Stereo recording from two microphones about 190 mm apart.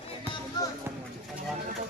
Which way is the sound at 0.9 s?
10° right (ahead or behind).